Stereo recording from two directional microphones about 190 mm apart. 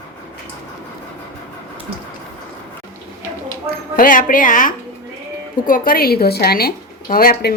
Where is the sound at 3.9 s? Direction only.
45° left (ahead or behind).